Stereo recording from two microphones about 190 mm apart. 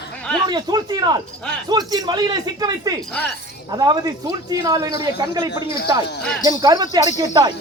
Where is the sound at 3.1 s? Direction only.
5° left (ahead or behind).